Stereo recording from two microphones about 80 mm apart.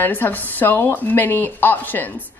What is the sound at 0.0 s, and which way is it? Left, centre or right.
Speech, left.